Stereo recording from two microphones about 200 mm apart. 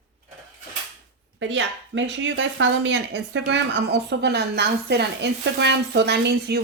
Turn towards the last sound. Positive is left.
turn(degrees=-55)  # may be behind; listen again after turning